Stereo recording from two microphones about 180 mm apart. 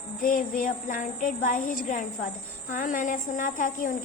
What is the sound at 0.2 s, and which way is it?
A woman's voice, 50° left (ahead or behind).